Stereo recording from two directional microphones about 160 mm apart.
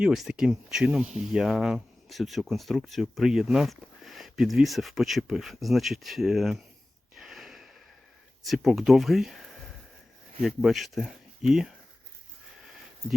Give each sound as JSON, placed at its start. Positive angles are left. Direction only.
{"t": 0.0, "sound": "speech", "side_deg": -5}
{"t": 7.2, "sound": "gasp", "side_deg": -5}
{"t": 8.4, "sound": "speech", "side_deg": 0}